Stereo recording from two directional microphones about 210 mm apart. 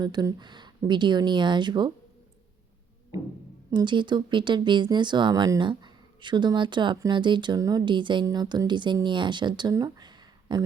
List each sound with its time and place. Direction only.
0.0 s speech: 20° right (ahead or behind)
3.7 s speech: 20° right (ahead or behind)